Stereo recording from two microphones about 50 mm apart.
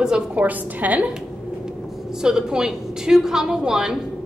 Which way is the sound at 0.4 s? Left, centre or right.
Right.